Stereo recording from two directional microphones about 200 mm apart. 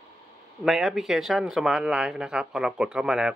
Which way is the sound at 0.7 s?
Centre (ahead or behind).